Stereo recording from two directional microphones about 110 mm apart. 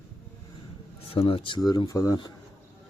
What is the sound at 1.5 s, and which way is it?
Speech, 35° left (ahead or behind).